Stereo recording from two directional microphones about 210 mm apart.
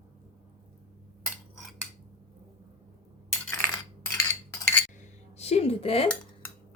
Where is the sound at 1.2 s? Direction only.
Centre (ahead or behind).